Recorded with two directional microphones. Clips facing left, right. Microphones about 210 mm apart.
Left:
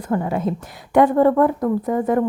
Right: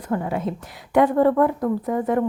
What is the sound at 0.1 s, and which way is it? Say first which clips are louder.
Speech: left 3 dB; 40° left (ahead or behind).